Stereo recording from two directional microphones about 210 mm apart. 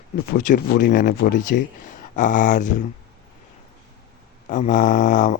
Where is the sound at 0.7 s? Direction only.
50° left (ahead or behind).